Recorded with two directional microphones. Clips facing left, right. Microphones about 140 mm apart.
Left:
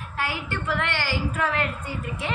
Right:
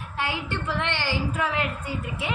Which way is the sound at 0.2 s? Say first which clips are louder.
Even; 20° right (ahead or behind).